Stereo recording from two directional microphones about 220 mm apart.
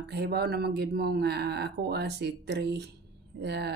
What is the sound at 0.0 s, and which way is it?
Speech, 50° right (ahead or behind).